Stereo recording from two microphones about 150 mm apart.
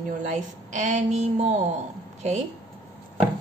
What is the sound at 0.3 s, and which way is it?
Speech, 50° right (ahead or behind).